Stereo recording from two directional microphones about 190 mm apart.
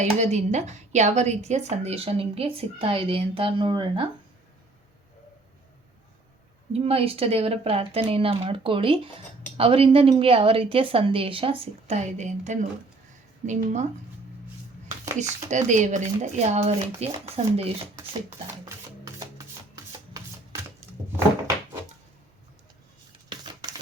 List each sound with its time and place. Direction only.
0.0 s a woman's voice: 35° right (ahead or behind)
6.7 s a woman's voice: 30° right (ahead or behind)
15.2 s a woman's voice: 40° right (ahead or behind)
17.9 s speech: 15° right (ahead or behind)
23.3 s a sound: 25° right (ahead or behind)